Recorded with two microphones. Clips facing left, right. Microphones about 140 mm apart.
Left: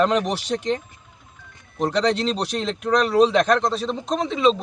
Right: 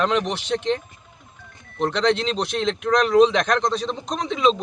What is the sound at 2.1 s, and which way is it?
Speech, 35° left (ahead or behind).